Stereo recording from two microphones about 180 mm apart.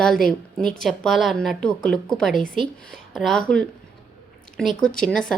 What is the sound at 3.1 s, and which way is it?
A woman's voice, centre (ahead or behind).